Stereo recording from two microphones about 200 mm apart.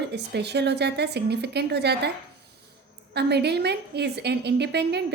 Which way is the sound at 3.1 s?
55° right (ahead or behind).